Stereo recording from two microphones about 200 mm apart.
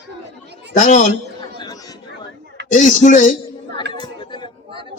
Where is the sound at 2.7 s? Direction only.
40° left (ahead or behind).